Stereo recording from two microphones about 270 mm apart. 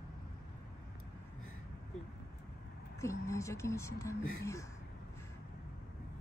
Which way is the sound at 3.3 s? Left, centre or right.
Centre.